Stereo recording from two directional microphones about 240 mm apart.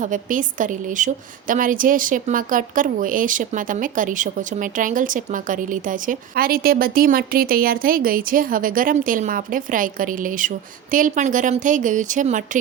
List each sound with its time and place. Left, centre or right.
0.0 s a woman's voice: right